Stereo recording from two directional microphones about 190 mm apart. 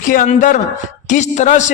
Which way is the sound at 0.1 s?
45° left (ahead or behind).